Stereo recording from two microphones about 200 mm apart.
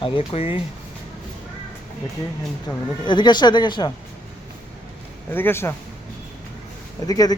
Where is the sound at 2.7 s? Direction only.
20° left (ahead or behind).